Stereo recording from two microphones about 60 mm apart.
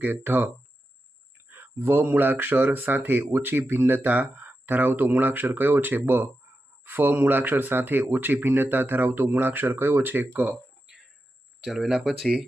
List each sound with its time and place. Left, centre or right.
0.0 s speech: right
11.6 s speech: centre